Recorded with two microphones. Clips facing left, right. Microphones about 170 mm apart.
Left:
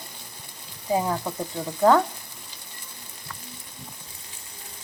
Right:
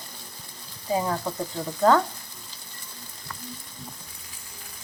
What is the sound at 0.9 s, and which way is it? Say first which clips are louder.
Frying: left 2 dB; 15° left (ahead or behind).